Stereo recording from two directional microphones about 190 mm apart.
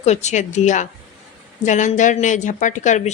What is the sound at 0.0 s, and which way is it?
Speech, 35° left (ahead or behind).